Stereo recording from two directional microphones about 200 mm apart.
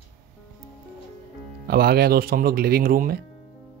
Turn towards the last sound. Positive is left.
turn(degrees=-45)  # may be behind; listen again after turning